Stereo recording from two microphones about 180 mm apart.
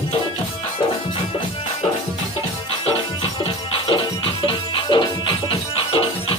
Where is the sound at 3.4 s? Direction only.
30° left (ahead or behind).